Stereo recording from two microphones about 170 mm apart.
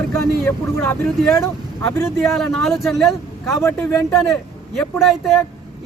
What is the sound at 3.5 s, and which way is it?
Speech, 15° left (ahead or behind).